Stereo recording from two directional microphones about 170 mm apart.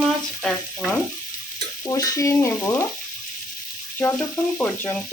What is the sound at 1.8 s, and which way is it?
Stir, 20° left (ahead or behind).